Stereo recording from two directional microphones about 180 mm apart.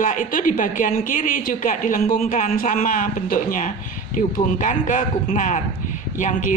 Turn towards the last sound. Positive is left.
turn(degrees=50)  # may be behind; listen again after turning